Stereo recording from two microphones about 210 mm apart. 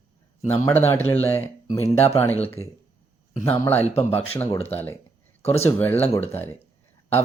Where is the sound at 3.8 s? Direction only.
30° left (ahead or behind).